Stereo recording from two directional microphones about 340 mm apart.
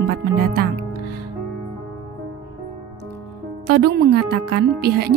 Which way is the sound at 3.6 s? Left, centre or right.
Right.